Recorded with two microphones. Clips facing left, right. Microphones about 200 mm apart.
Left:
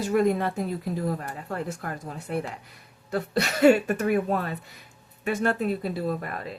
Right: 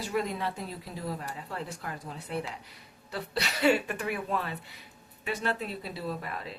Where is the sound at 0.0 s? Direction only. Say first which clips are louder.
Left 8 dB; 50° left (ahead or behind).